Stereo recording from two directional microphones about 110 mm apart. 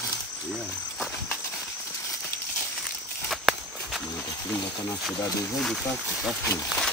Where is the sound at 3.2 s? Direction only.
Centre (ahead or behind).